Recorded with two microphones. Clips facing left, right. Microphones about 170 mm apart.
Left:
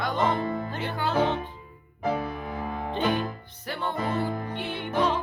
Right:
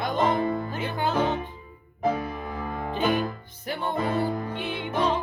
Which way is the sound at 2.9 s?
5° right (ahead or behind).